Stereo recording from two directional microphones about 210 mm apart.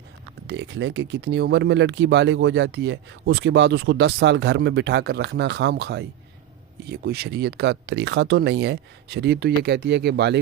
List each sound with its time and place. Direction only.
0.4 s speech: 55° right (ahead or behind)